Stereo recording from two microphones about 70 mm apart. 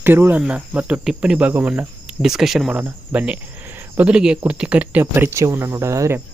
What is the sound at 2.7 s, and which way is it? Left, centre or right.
Speech, right.